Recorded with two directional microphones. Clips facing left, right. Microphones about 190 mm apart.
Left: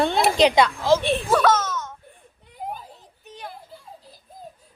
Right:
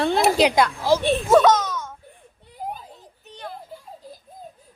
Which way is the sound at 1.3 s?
20° right (ahead or behind).